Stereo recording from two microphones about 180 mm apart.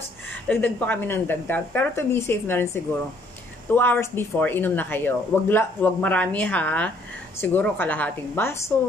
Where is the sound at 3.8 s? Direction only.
10° left (ahead or behind).